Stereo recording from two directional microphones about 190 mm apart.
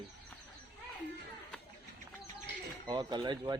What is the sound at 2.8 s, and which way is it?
Speech, 20° right (ahead or behind).